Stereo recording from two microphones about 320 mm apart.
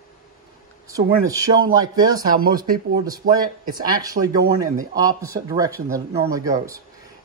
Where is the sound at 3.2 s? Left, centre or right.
Right.